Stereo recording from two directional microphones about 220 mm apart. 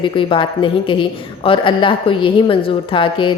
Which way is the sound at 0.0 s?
25° left (ahead or behind).